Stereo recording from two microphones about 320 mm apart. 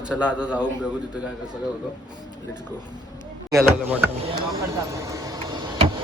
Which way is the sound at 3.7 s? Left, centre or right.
Centre.